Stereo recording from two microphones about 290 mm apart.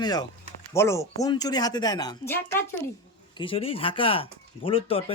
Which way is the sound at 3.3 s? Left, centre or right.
Centre.